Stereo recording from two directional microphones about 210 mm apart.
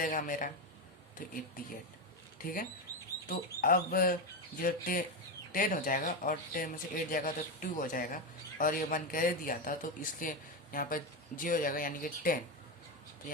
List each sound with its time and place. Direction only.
0.0 s speech: 40° left (ahead or behind)
2.4 s speech: 40° left (ahead or behind)